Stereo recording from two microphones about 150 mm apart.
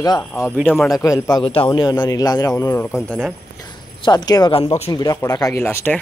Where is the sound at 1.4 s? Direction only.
35° left (ahead or behind); by 2.9 s 20° left (ahead or behind).